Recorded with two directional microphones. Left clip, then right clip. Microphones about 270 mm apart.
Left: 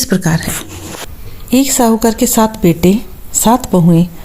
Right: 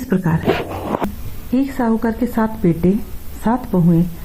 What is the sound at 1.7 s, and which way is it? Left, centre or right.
Speech, left.